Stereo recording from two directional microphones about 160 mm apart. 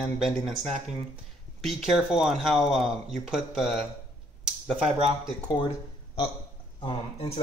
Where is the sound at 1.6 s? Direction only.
Centre (ahead or behind).